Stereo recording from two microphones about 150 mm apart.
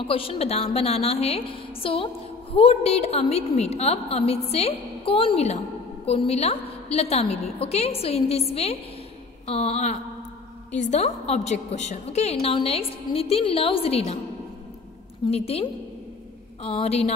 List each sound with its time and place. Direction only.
0.0 s a woman's voice: 40° left (ahead or behind)
15.2 s a woman's voice: 40° left (ahead or behind)